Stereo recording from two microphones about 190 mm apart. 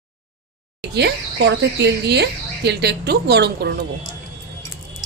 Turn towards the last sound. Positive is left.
turn(degrees=-60)  # may be behind; listen again after turning